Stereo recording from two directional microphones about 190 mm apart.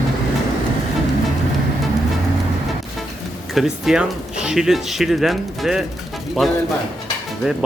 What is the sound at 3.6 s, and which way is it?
Speech, centre (ahead or behind).